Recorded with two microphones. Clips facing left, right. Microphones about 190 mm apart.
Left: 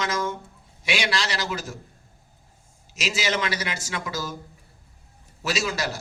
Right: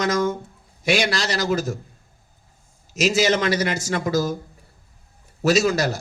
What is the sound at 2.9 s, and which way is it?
Speech, 45° right (ahead or behind).